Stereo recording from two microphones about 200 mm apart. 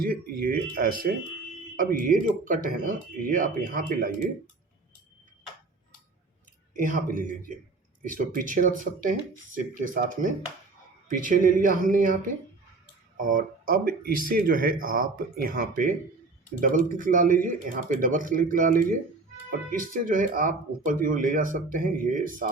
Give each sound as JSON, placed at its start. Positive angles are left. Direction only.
{"t": 0.0, "sound": "speech", "side_deg": -45}
{"t": 6.7, "sound": "speech", "side_deg": -40}